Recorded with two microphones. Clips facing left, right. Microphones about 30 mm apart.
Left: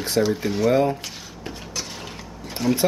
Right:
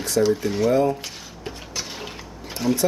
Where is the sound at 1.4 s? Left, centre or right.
Centre.